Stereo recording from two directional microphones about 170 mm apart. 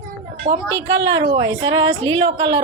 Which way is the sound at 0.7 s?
90° right.